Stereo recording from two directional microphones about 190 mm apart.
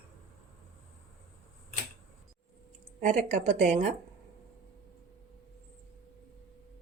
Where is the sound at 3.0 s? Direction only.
45° right (ahead or behind).